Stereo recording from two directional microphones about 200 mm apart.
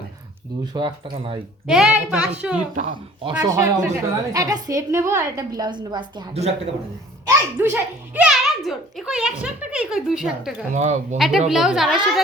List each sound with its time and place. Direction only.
0.6 s a woman's voice: 20° right (ahead or behind)
1.6 s a woman's voice: 5° right (ahead or behind)
2.7 s speech: 45° right (ahead or behind)
3.2 s a man's voice: 15° right (ahead or behind)
7.3 s a child's voice: 10° right (ahead or behind)
10.8 s speech: 35° right (ahead or behind)
11.2 s a woman's voice: centre (ahead or behind)